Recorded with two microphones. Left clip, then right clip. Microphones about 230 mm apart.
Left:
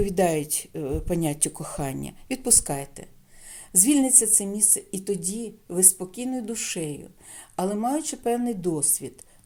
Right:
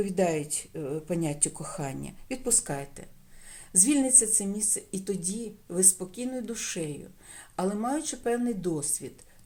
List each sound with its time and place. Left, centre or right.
0.2 s speech: left